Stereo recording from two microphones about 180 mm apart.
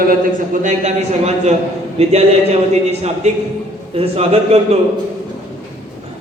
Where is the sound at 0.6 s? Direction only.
40° right (ahead or behind).